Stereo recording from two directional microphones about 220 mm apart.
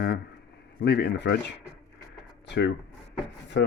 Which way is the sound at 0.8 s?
50° left (ahead or behind).